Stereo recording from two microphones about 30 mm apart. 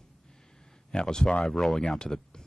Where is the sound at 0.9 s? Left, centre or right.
Left.